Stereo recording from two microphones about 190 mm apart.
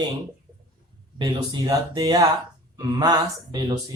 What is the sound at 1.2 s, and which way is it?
Speech, 20° right (ahead or behind).